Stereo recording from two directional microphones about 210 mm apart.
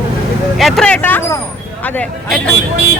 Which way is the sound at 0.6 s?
5° left (ahead or behind).